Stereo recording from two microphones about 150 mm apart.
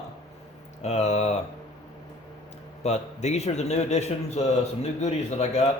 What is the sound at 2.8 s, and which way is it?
A man's voice, 50° left (ahead or behind).